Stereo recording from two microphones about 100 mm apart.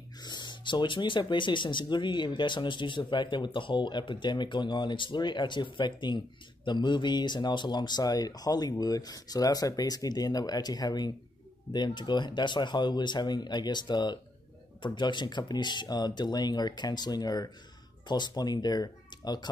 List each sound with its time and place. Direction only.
0.2 s speech: 45° left (ahead or behind)